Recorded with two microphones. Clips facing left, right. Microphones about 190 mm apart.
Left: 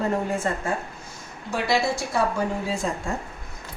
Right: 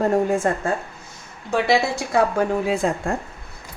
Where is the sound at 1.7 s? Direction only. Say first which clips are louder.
Right 1 dB; 60° right (ahead or behind).